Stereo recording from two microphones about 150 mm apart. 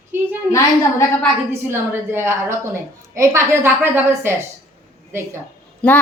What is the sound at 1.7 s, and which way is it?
A woman's voice, 15° right (ahead or behind).